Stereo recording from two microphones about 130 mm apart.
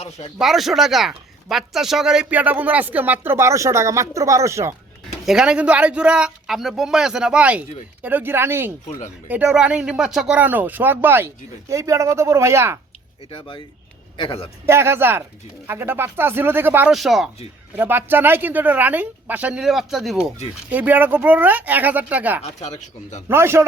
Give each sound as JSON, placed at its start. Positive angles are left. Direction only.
{"t": 0.3, "sound": "speech", "side_deg": 0}
{"t": 5.2, "sound": "speech", "side_deg": -5}
{"t": 13.3, "sound": "a man's voice", "side_deg": 40}
{"t": 14.7, "sound": "speech", "side_deg": -20}
{"t": 16.9, "sound": "speech", "side_deg": 0}
{"t": 17.7, "sound": "speech", "side_deg": -15}
{"t": 20.7, "sound": "speech", "side_deg": -15}
{"t": 22.4, "sound": "speech", "side_deg": 60}
{"t": 23.3, "sound": "speech", "side_deg": -20}